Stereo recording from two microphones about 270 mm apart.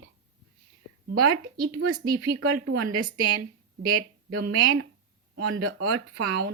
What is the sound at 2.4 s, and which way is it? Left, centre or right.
Speech, right.